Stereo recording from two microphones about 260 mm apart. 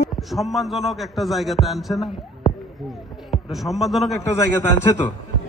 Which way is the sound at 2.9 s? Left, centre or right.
Centre.